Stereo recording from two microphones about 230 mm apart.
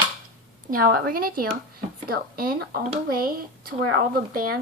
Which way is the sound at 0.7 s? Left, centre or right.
Right.